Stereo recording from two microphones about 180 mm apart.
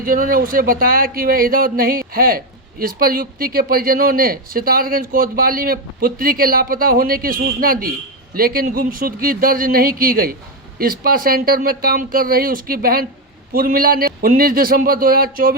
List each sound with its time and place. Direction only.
0.0 s a man's voice: 50° right (ahead or behind)